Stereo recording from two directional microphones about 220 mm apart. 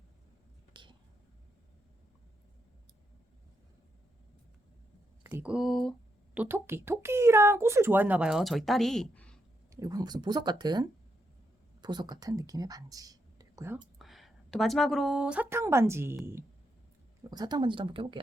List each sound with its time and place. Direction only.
0.7 s a sound: 20° right (ahead or behind)
5.2 s speech: 10° right (ahead or behind)
9.8 s speech: 15° right (ahead or behind)
14.0 s a woman's voice: centre (ahead or behind); by 18.2 s 25° right (ahead or behind)